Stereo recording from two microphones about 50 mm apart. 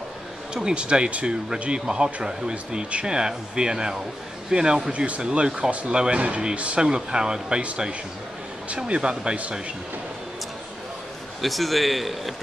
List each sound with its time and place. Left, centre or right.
0.6 s speech: centre
11.4 s a man's voice: centre